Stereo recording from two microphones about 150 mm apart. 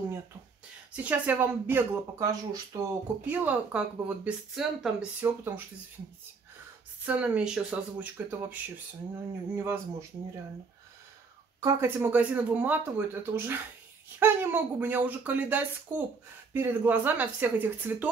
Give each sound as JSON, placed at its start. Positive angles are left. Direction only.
{"t": 0.9, "sound": "speech", "side_deg": -10}
{"t": 3.3, "sound": "speech", "side_deg": -10}
{"t": 7.1, "sound": "speech", "side_deg": -10}
{"t": 11.6, "sound": "speech", "side_deg": -15}